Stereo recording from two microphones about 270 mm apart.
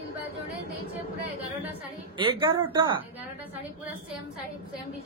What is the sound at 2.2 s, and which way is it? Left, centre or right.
Speech, centre.